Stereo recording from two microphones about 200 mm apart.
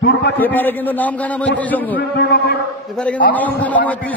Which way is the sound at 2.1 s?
55° left (ahead or behind).